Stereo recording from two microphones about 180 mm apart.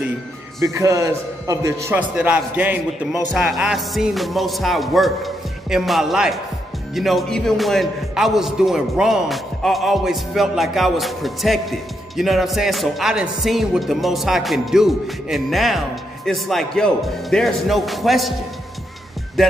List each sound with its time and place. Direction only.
0.6 s a man's voice: 15° right (ahead or behind); by 18.3 s centre (ahead or behind)